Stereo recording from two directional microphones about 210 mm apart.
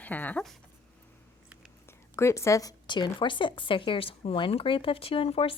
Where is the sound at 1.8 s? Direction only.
10° left (ahead or behind).